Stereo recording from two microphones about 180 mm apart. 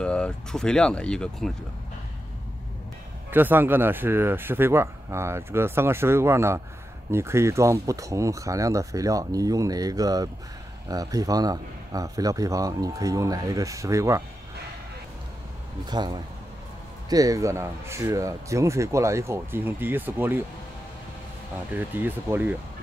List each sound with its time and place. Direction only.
0.0 s speech: 5° left (ahead or behind)
3.3 s a man's voice: 10° right (ahead or behind)
15.9 s a man's voice: 25° right (ahead or behind)
21.7 s speech: 10° right (ahead or behind)